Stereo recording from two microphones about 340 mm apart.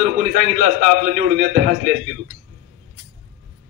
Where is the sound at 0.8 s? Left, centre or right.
Right.